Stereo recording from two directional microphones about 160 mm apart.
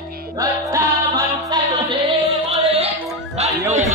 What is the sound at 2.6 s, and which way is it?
Music, 40° right (ahead or behind).